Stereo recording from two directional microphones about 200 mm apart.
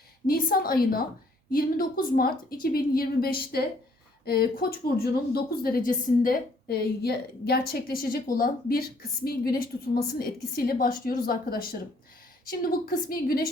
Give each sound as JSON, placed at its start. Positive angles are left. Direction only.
{"t": 0.3, "sound": "a woman's voice", "side_deg": 45}